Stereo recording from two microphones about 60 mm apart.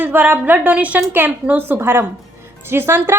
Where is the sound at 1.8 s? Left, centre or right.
Right.